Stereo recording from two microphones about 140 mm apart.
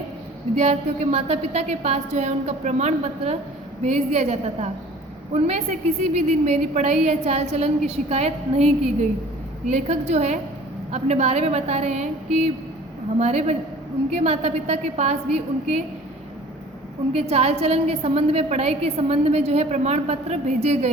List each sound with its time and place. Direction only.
0.5 s a woman's voice: 50° right (ahead or behind)
17.2 s a woman's voice: 50° right (ahead or behind)